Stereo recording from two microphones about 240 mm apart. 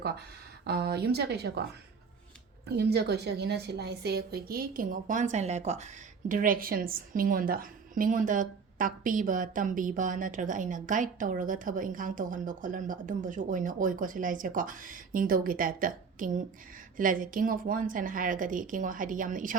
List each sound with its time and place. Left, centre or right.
0.6 s speech: right
2.6 s a woman's voice: right